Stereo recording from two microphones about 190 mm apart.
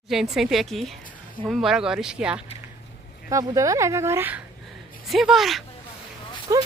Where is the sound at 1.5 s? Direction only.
Centre (ahead or behind).